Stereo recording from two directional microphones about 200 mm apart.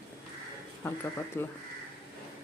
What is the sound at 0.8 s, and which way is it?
Speech, 15° left (ahead or behind).